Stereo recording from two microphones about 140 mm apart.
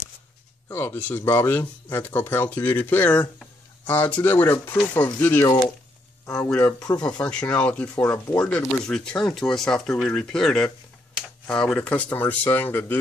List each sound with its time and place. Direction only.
0.7 s speech: 15° left (ahead or behind)
7.1 s speech: 5° left (ahead or behind)
7.9 s speech: 25° left (ahead or behind)
8.4 s speech: 5° left (ahead or behind)